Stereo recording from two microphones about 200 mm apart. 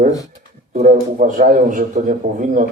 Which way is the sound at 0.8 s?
40° right (ahead or behind).